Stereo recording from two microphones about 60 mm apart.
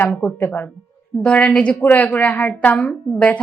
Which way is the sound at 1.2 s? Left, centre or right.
Centre.